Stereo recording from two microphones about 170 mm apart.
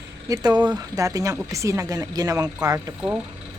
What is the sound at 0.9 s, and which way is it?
A woman's voice, 20° right (ahead or behind).